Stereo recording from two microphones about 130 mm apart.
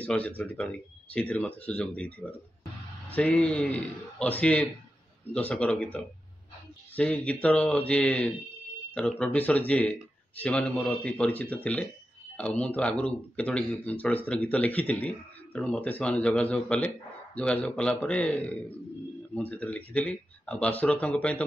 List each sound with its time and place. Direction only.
0.0 s speech: 10° left (ahead or behind)